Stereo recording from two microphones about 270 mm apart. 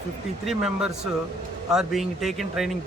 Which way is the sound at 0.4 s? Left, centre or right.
Centre.